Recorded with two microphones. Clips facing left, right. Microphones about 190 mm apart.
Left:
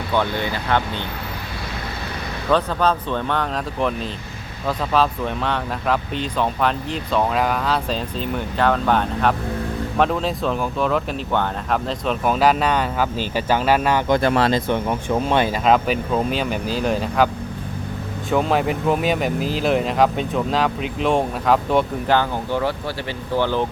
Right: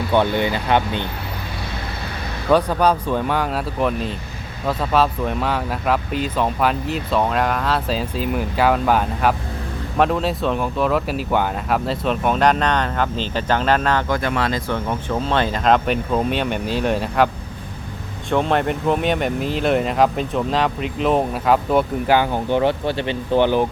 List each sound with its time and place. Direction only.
0.1 s speech: 20° right (ahead or behind)
2.5 s speech: 10° right (ahead or behind); by 14.0 s 10° left (ahead or behind)
14.1 s speech: 30° left (ahead or behind)
14.7 s speech: 15° left (ahead or behind)
18.3 s speech: 5° left (ahead or behind); by 23.6 s 15° right (ahead or behind)